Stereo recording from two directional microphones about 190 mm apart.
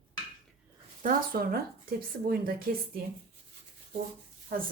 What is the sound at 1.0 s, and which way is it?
A woman's voice, 50° right (ahead or behind).